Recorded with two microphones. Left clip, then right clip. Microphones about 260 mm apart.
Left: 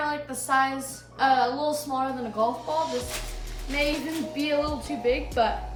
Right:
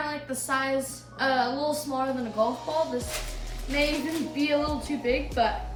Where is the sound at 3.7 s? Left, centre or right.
Centre.